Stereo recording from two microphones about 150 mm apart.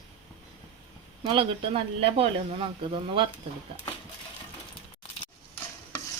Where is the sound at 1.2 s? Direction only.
35° right (ahead or behind).